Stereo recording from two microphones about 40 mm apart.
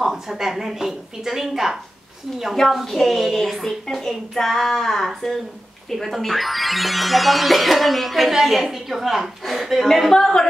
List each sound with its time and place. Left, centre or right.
0.0 s a woman's voice: centre
2.7 s speech: centre
10.1 s speech: centre